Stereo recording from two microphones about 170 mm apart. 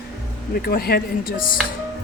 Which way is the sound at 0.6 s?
65° left (ahead or behind).